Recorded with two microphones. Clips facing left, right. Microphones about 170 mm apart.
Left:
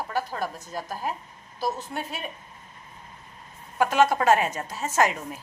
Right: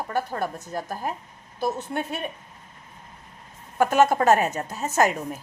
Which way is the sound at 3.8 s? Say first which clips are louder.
Right 2 dB; 45° right (ahead or behind).